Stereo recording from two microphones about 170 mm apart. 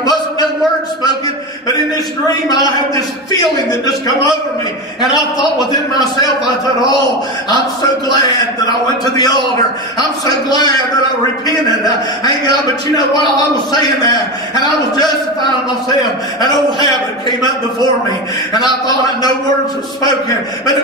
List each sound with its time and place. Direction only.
0.0 s a sound: 25° left (ahead or behind)
2.5 s a man's voice: 20° left (ahead or behind)
7.8 s a man's voice: 25° left (ahead or behind)
11.8 s a man's voice: 25° left (ahead or behind)